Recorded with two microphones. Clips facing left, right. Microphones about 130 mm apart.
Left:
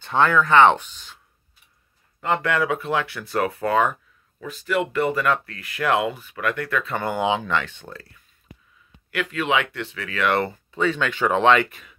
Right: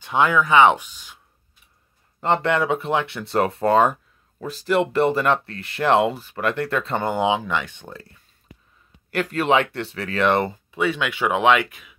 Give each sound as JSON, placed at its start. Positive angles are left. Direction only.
{"t": 0.0, "sound": "speech", "side_deg": -10}
{"t": 2.1, "sound": "speech", "side_deg": -30}
{"t": 9.1, "sound": "speech", "side_deg": -40}
{"t": 10.3, "sound": "speech", "side_deg": -15}